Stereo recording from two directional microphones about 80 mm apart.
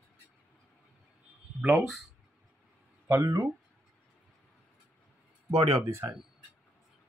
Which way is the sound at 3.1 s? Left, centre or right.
Right.